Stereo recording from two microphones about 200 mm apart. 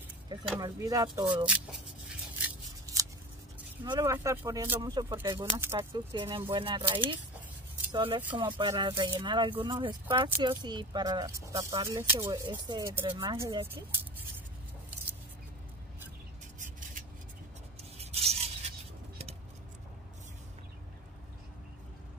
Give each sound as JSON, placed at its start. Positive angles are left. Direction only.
{"t": 0.6, "sound": "speech", "side_deg": -20}
{"t": 1.2, "sound": "speech", "side_deg": -5}
{"t": 2.4, "sound": "scissors", "side_deg": -15}
{"t": 3.8, "sound": "speech", "side_deg": -20}
{"t": 6.1, "sound": "speech", "side_deg": -25}
{"t": 17.9, "sound": "a sound", "side_deg": -30}